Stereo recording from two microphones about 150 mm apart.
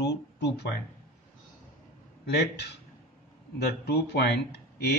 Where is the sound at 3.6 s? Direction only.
90° left.